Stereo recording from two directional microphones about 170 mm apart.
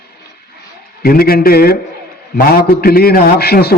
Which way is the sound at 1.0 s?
60° left (ahead or behind).